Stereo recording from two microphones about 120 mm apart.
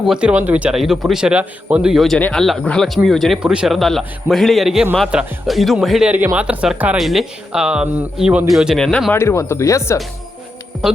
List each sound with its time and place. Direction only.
0.1 s a man's voice: 10° right (ahead or behind)
2.1 s a man's voice: 10° left (ahead or behind)
9.1 s speech: 25° left (ahead or behind)
10.8 s speech: 5° right (ahead or behind)